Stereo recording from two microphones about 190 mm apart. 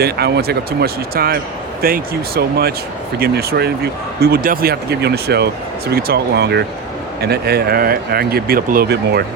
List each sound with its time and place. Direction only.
0.0 s speech: 60° right (ahead or behind)